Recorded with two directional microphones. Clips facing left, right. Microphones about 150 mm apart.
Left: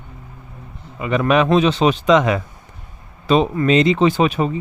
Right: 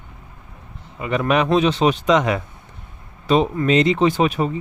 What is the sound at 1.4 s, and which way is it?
Speech, 90° left.